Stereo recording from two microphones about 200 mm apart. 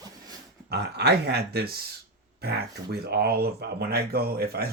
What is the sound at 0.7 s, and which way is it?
Speech, 55° right (ahead or behind).